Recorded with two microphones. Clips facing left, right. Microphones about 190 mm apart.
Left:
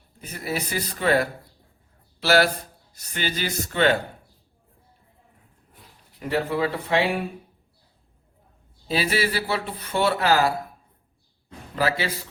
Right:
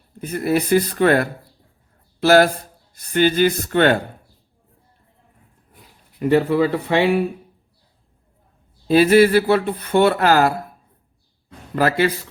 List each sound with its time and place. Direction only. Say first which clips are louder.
0.2 s speech: right 10 dB; 55° right (ahead or behind)
6.1 s speech: right 8 dB; 60° right (ahead or behind)
8.9 s speech: right 12 dB; 55° right (ahead or behind)
11.8 s speech: right 7 dB; 55° right (ahead or behind)